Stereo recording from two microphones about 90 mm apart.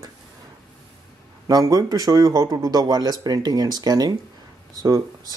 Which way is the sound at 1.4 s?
40° right (ahead or behind).